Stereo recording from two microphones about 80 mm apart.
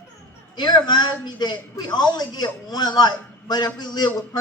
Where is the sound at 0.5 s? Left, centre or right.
Left.